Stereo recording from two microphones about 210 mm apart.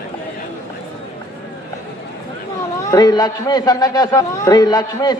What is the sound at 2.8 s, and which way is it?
A man's voice, 15° left (ahead or behind).